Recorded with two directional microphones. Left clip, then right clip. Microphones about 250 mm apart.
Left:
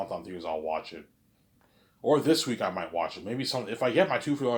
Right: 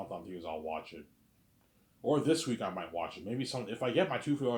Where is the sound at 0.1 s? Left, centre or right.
Centre.